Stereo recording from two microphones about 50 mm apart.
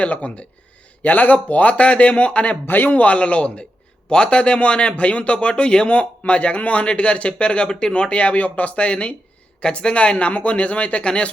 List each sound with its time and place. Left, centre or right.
0.0 s speech: left
2.6 s a man's voice: left
2.9 s speech: left